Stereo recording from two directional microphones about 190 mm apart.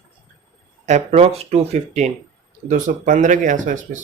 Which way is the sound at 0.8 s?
35° right (ahead or behind).